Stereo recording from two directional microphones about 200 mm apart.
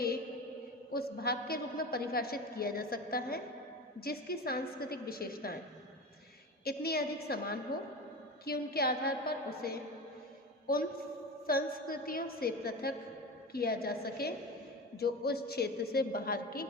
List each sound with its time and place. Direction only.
0.9 s a woman's voice: 50° left (ahead or behind)
6.7 s a woman's voice: 50° left (ahead or behind)